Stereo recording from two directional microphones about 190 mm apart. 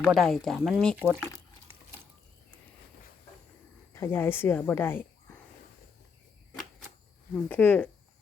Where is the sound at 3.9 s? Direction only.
10° left (ahead or behind).